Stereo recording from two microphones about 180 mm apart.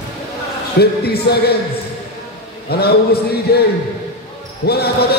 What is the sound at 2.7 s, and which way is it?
A man's voice, 60° left (ahead or behind).